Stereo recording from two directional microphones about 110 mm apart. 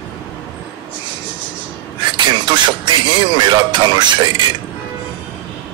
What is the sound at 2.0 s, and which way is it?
A man's voice, 45° right (ahead or behind).